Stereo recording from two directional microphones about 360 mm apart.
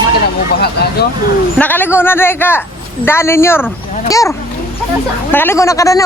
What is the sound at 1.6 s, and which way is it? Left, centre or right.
Speech, centre.